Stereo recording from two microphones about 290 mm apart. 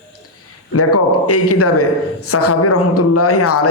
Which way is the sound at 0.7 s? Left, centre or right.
Left.